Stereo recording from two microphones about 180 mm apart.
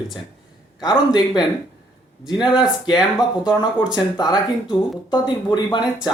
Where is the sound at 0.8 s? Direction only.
20° left (ahead or behind).